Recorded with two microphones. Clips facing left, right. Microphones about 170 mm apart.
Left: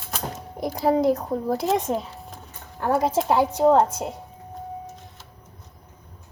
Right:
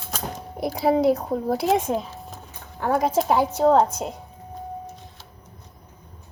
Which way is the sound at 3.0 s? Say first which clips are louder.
Right 1 dB; 10° right (ahead or behind).